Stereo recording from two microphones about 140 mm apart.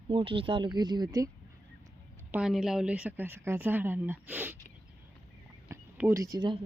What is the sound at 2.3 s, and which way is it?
A woman's voice, 5° right (ahead or behind).